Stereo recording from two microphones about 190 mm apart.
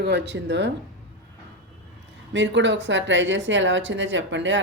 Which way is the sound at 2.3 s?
70° right (ahead or behind).